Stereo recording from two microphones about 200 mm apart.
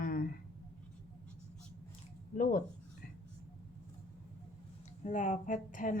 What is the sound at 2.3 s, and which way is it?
Speech, 45° left (ahead or behind).